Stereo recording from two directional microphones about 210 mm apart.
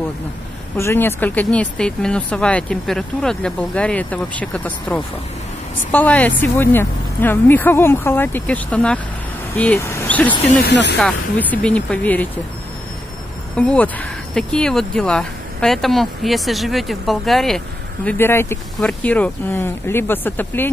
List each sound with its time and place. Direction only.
0.7 s speech: 10° left (ahead or behind)
10.6 s speech: 55° left (ahead or behind)
11.0 s speech: 5° left (ahead or behind)
13.6 s speech: 5° left (ahead or behind)